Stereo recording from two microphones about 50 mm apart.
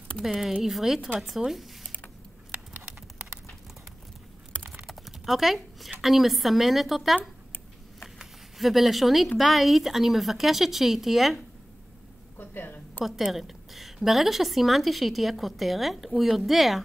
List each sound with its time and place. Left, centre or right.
0.2 s a woman's voice: centre
4.8 s a sound: centre
5.9 s a woman's voice: centre
8.2 s a woman's voice: centre
12.4 s a sound: left
13.0 s a woman's voice: centre